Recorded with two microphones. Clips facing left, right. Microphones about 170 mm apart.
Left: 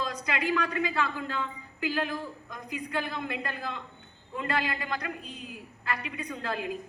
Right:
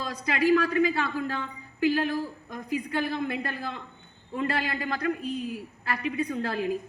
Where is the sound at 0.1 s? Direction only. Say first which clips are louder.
Right 7 dB; 35° right (ahead or behind).